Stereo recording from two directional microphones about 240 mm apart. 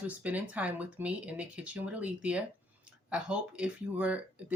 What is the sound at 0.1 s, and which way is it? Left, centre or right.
Speech, centre.